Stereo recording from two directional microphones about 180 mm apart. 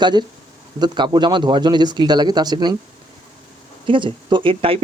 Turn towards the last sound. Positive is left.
turn(degrees=-30)  # may be behind; listen again after turning